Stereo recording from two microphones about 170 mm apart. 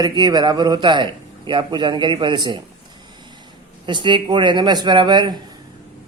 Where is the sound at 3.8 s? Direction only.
25° right (ahead or behind).